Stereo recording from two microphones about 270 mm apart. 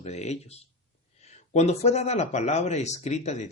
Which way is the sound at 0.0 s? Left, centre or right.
Left.